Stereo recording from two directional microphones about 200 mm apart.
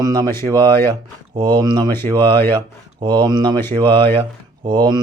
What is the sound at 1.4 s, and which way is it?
Mantra, 20° right (ahead or behind).